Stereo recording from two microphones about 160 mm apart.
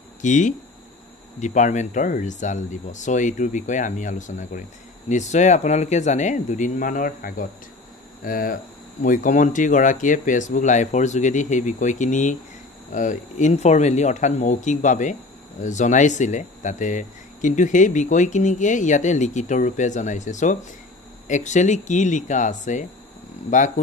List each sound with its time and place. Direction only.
0.2 s speech: 50° left (ahead or behind)